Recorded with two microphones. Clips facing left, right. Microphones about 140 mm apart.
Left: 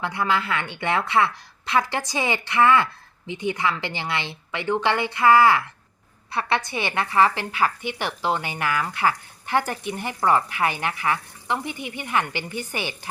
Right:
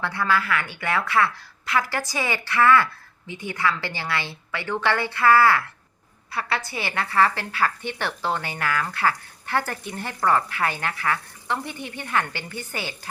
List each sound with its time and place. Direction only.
0.0 s a woman's voice: 20° left (ahead or behind)